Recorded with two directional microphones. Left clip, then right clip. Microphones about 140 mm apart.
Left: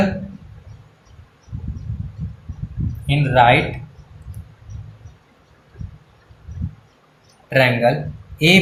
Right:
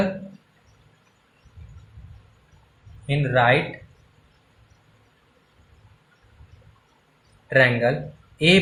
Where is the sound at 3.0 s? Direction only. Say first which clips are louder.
Left 6 dB; 60° right (ahead or behind).